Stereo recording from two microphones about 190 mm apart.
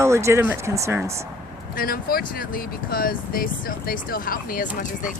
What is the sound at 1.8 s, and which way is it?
Speech, 50° left (ahead or behind).